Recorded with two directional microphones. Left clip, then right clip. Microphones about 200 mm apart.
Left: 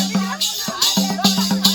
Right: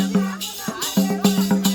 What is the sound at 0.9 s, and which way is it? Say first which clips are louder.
Music: left 3 dB; 20° right (ahead or behind).